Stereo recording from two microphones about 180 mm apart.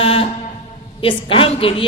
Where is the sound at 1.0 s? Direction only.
30° left (ahead or behind).